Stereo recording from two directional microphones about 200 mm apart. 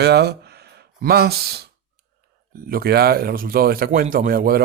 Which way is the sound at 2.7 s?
50° right (ahead or behind).